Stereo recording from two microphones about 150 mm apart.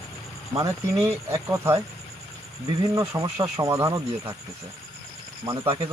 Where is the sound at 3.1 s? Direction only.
25° right (ahead or behind).